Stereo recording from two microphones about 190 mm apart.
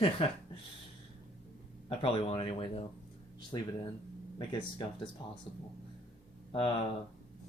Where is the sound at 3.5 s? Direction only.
20° left (ahead or behind).